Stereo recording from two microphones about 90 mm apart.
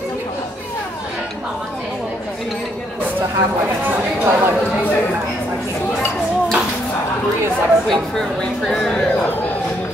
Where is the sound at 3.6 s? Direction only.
20° right (ahead or behind).